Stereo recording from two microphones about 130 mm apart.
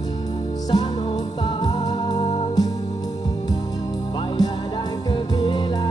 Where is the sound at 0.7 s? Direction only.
40° left (ahead or behind).